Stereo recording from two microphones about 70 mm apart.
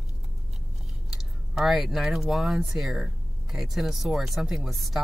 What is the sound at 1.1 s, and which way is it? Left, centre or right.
Speech, centre.